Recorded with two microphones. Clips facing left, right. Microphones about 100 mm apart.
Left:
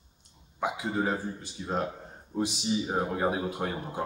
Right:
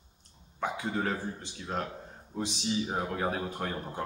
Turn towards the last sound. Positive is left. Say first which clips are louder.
# left 3 dB
turn(degrees=10)  # may be behind; listen again after turning